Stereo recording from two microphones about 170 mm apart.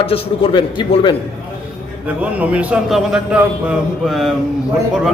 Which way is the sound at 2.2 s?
10° right (ahead or behind).